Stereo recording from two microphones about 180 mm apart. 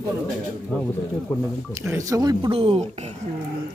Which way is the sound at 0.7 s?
10° left (ahead or behind).